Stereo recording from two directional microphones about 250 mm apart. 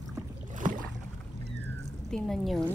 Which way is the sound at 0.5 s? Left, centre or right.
Right.